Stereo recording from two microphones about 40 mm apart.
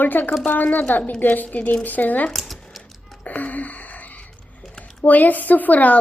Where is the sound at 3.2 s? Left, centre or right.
Left.